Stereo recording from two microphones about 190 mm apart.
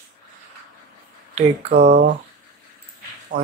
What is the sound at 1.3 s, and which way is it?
Speech, 35° right (ahead or behind).